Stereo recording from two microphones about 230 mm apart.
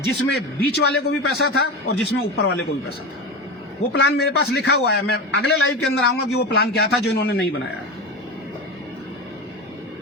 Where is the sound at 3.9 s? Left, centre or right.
Left.